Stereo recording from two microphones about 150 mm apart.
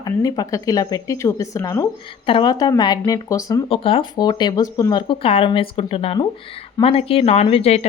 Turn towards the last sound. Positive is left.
turn(degrees=45)  # may be behind; listen again after turning